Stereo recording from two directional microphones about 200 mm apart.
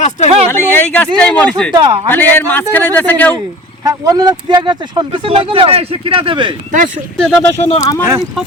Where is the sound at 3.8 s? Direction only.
15° right (ahead or behind).